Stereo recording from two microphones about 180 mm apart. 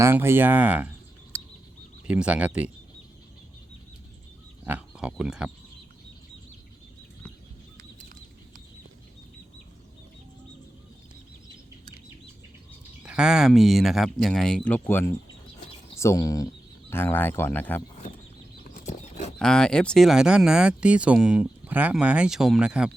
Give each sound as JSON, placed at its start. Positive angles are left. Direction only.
{"t": 0.0, "sound": "speech", "side_deg": -15}
{"t": 4.6, "sound": "speech", "side_deg": -5}
{"t": 7.8, "sound": "a sound", "side_deg": -50}
{"t": 13.0, "sound": "speech", "side_deg": -5}
{"t": 18.6, "sound": "bird flight", "side_deg": 45}
{"t": 19.4, "sound": "speech", "side_deg": 5}